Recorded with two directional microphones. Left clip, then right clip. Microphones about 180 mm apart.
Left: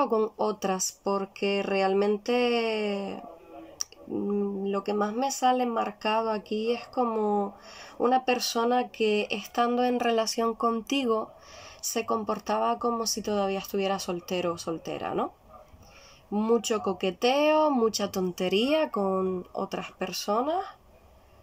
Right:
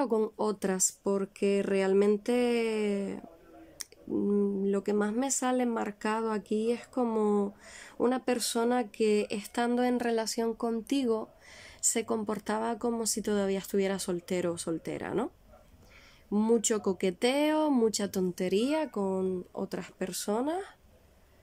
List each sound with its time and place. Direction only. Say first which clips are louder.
0.1 s speech: left 3 dB; 40° right (ahead or behind)
4.3 s speech: even; 40° right (ahead or behind)
11.9 s speech: left 4 dB; 45° right (ahead or behind)
16.3 s speech: left 2 dB; 40° right (ahead or behind)